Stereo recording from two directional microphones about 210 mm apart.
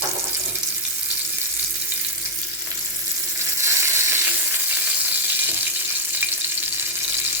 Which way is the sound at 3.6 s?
10° right (ahead or behind).